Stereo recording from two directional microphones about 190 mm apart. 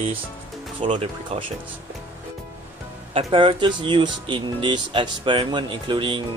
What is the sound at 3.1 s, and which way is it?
Speech, 30° right (ahead or behind).